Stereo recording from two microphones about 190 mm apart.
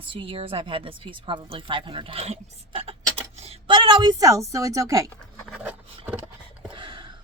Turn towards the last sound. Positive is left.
turn(degrees=-25)  # may be behind; listen again after turning